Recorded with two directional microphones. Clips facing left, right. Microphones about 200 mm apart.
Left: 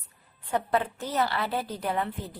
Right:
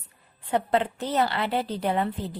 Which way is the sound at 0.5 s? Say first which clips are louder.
Right 3 dB; 25° right (ahead or behind).